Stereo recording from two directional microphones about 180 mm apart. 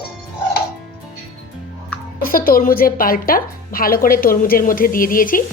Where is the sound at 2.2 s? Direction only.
55° left (ahead or behind).